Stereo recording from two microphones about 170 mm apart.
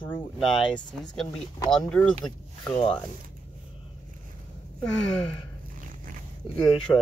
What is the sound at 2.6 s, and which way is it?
Speech, 30° left (ahead or behind).